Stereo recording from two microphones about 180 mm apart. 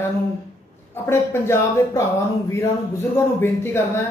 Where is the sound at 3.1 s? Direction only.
15° left (ahead or behind).